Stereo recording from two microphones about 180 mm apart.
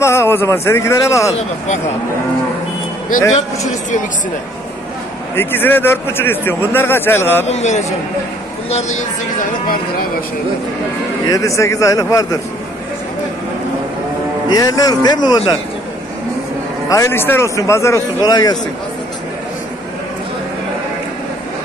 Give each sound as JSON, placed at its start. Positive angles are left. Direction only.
{"t": 0.0, "sound": "speech", "side_deg": 15}
{"t": 5.3, "sound": "speech", "side_deg": 10}
{"t": 7.4, "sound": "a man's voice", "side_deg": 40}
{"t": 11.2, "sound": "a man's voice", "side_deg": 20}
{"t": 14.5, "sound": "a man's voice", "side_deg": 20}
{"t": 16.9, "sound": "speech", "side_deg": 15}